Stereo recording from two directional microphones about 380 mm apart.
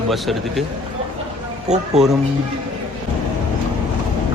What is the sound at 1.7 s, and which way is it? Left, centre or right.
Speech, centre.